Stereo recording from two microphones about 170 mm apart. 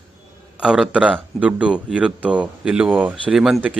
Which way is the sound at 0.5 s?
5° right (ahead or behind).